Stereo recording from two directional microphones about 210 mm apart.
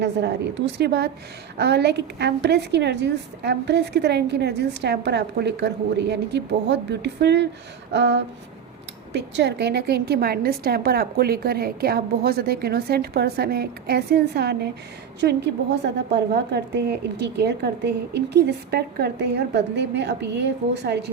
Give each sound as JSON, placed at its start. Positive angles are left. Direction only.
{"t": 0.0, "sound": "a woman's voice", "side_deg": -55}
{"t": 7.9, "sound": "a sound", "side_deg": -55}
{"t": 9.1, "sound": "a woman's voice", "side_deg": -55}